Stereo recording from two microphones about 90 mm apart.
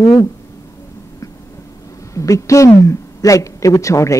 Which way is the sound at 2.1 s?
35° left (ahead or behind).